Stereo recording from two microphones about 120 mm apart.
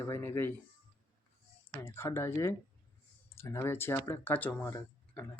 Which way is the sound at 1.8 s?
20° left (ahead or behind).